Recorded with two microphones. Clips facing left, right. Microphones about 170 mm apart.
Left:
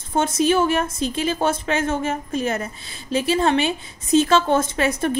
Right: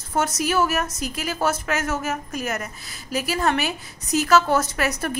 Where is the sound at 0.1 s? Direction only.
25° left (ahead or behind).